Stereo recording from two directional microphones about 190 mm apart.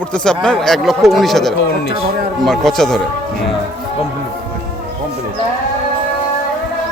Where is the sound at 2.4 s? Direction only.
Centre (ahead or behind).